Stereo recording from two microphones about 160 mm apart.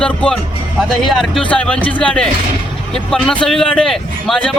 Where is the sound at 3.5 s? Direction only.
5° left (ahead or behind).